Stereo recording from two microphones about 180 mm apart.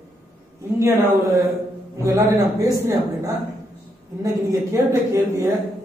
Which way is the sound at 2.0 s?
20° right (ahead or behind).